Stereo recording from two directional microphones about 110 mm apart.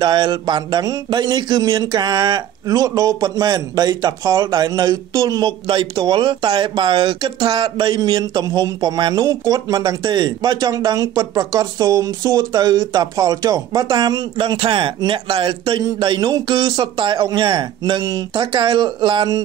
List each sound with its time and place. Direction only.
0.0 s speech: 40° right (ahead or behind)
5.4 s speech: 50° right (ahead or behind)
14.4 s speech: 50° right (ahead or behind)